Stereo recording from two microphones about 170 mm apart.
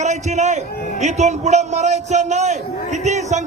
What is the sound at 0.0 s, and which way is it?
A man's voice, 40° right (ahead or behind).